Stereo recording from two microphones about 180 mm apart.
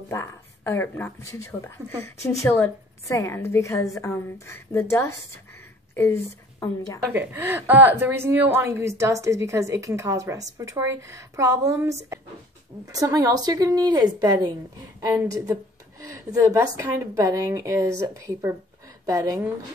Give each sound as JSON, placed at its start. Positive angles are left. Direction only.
{"t": 0.1, "sound": "a woman's voice", "side_deg": 15}
{"t": 7.1, "sound": "a woman's voice", "side_deg": -10}